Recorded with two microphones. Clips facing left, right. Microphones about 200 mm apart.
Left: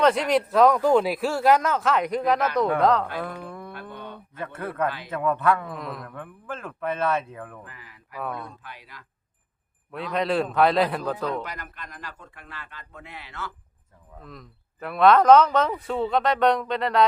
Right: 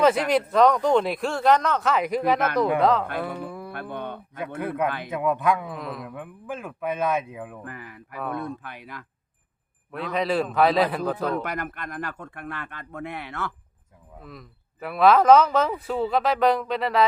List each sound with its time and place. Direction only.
0.0 s speech: 5° right (ahead or behind)
3.2 s a sound: 5° right (ahead or behind)
3.7 s a sound: 55° right (ahead or behind)
4.6 s speech: 15° right (ahead or behind)
4.9 s speech: 55° right (ahead or behind)
5.1 s speech: 10° right (ahead or behind)
5.6 s speech: centre (ahead or behind)
6.1 s speech: 10° right (ahead or behind)
7.6 s speech: 55° right (ahead or behind)
10.1 s speech: centre (ahead or behind)
11.4 s speech: 55° right (ahead or behind)
14.2 s speech: 5° right (ahead or behind)